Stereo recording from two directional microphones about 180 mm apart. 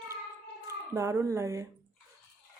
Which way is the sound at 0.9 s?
15° right (ahead or behind).